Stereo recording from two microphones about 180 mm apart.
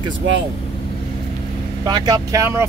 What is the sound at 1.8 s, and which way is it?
Speech, 20° right (ahead or behind).